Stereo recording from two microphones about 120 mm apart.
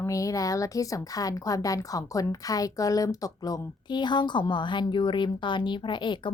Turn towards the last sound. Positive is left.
turn(degrees=40)  # may be behind; listen again after turning